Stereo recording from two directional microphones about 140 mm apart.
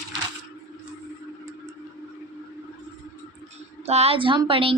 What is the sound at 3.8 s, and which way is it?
Speech, 45° right (ahead or behind).